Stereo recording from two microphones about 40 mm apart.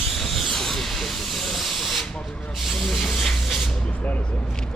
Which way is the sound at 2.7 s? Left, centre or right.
Centre.